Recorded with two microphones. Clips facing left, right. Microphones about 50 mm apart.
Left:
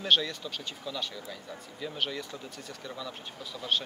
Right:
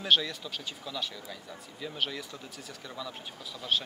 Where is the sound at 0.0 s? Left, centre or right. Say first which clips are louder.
Even; centre.